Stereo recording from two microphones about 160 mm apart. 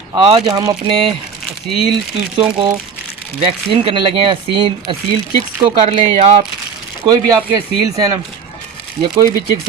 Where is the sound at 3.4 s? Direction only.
35° right (ahead or behind).